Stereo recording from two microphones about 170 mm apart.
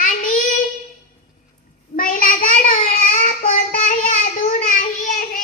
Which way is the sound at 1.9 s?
55° left (ahead or behind).